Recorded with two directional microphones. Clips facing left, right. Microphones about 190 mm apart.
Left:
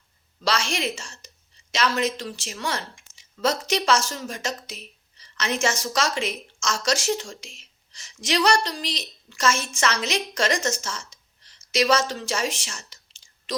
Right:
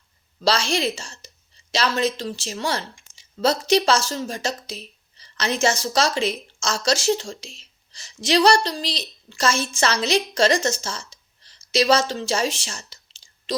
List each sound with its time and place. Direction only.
0.4 s a woman's voice: 30° right (ahead or behind)